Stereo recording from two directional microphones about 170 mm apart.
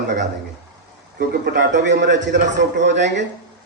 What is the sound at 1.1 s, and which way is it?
Speech, 70° right (ahead or behind).